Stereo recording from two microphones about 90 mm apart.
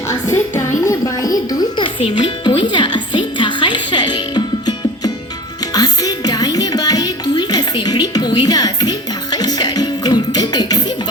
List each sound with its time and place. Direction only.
0.1 s a child's voice: 35° left (ahead or behind)
1.8 s a child's voice: 75° left (ahead or behind)
2.6 s music: 60° left (ahead or behind)